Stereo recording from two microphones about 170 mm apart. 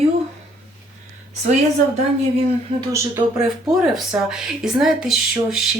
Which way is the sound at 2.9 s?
15° right (ahead or behind).